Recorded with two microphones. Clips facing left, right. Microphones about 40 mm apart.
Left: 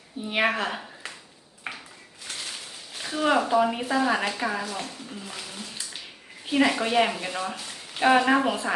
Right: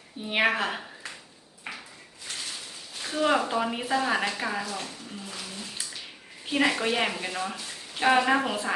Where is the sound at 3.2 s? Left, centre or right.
Centre.